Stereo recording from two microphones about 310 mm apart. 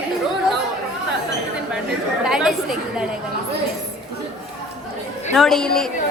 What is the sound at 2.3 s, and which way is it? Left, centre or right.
Speech, centre.